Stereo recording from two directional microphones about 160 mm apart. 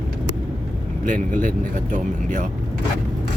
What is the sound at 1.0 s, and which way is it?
Speech, 55° right (ahead or behind).